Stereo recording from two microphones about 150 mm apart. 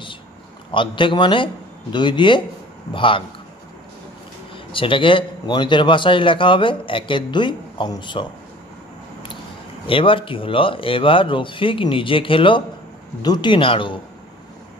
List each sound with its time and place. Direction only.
0.7 s a man's voice: 35° left (ahead or behind)
4.7 s a man's voice: 35° left (ahead or behind)
9.8 s a man's voice: 35° left (ahead or behind)